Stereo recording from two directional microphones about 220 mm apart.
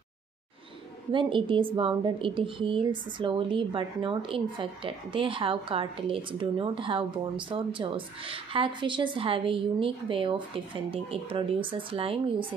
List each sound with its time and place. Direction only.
1.1 s speech: 20° right (ahead or behind)